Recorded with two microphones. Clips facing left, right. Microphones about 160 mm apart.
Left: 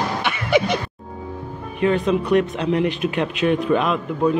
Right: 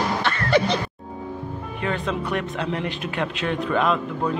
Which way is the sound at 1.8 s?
20° left (ahead or behind).